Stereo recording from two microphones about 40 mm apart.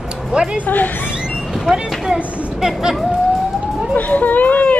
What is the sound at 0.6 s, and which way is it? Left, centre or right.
Speech, left.